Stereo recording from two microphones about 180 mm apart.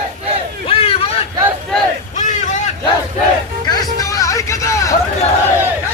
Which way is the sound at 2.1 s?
40° left (ahead or behind).